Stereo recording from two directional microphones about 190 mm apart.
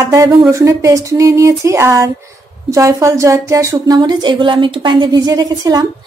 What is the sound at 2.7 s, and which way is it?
Speech, 15° right (ahead or behind).